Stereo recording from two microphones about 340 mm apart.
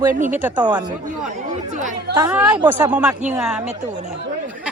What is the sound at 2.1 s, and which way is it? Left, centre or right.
Speech, centre.